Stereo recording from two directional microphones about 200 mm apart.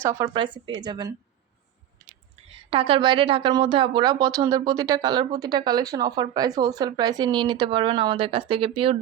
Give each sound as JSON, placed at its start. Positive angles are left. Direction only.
{"t": 0.0, "sound": "speech", "side_deg": -15}
{"t": 0.3, "sound": "a woman's voice", "side_deg": -25}
{"t": 2.5, "sound": "a woman's voice", "side_deg": -30}